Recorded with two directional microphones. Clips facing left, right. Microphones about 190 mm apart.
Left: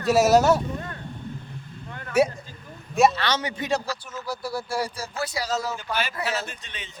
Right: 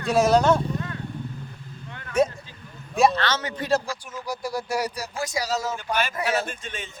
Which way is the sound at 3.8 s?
15° right (ahead or behind).